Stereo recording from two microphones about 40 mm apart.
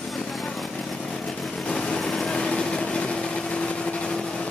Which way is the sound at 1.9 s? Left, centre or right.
Centre.